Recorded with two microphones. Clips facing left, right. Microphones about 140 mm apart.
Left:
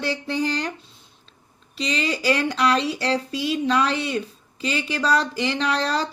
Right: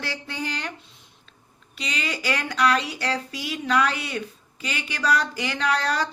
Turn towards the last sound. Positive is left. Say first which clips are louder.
# left 1 dB
turn(degrees=30)  # may be behind; listen again after turning